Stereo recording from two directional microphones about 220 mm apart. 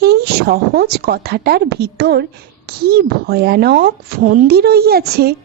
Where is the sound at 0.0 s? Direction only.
45° right (ahead or behind).